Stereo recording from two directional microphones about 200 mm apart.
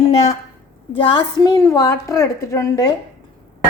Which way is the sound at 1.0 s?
25° left (ahead or behind).